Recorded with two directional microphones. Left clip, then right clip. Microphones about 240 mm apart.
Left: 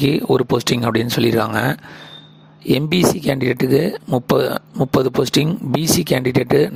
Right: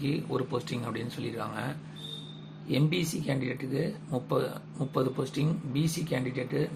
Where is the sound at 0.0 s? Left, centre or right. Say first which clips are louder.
Left 16 dB; left.